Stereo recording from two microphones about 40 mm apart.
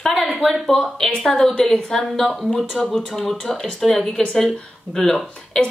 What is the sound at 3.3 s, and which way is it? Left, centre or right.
Speech, centre.